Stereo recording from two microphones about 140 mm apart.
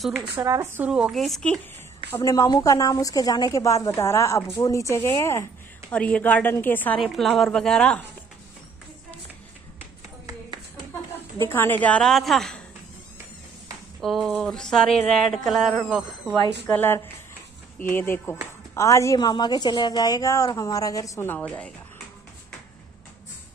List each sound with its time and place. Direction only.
0.4 s speech: 25° right (ahead or behind); by 1.6 s 5° left (ahead or behind)
2.0 s a woman's voice: 20° left (ahead or behind)
5.9 s a woman's voice: 10° left (ahead or behind)
7.0 s speech: centre (ahead or behind)
11.3 s a woman's voice: 15° left (ahead or behind)
14.0 s speech: centre (ahead or behind)
16.6 s a woman's voice: 15° left (ahead or behind)